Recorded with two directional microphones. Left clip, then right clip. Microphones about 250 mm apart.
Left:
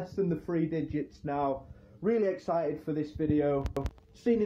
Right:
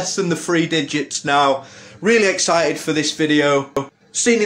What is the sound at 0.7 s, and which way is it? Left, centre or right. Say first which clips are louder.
Speech: right 14 dB; centre.